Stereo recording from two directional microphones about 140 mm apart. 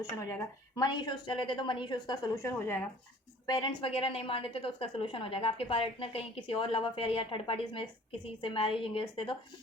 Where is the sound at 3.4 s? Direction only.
30° left (ahead or behind).